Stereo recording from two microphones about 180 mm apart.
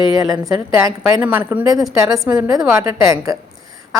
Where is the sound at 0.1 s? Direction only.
20° right (ahead or behind).